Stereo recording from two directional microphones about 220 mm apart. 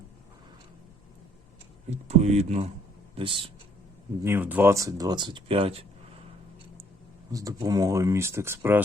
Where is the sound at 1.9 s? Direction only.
30° right (ahead or behind).